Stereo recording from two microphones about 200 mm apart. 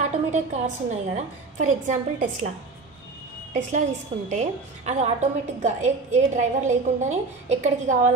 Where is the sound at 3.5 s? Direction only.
35° right (ahead or behind).